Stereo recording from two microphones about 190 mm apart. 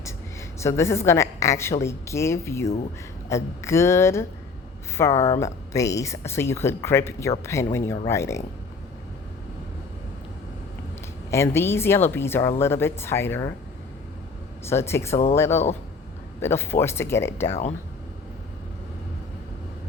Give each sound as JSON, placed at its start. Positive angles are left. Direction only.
{"t": 0.6, "sound": "speech", "side_deg": 15}
{"t": 11.3, "sound": "speech", "side_deg": 15}
{"t": 14.7, "sound": "speech", "side_deg": 15}
{"t": 17.5, "sound": "speech", "side_deg": 35}